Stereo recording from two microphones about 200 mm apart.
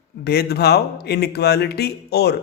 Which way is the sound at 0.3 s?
55° left (ahead or behind).